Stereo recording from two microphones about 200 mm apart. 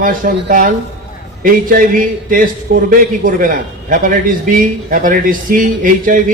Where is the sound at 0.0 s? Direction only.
45° right (ahead or behind).